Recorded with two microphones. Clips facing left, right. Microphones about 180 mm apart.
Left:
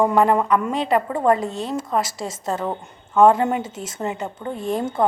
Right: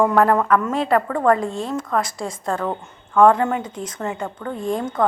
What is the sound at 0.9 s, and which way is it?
Speech, 20° left (ahead or behind).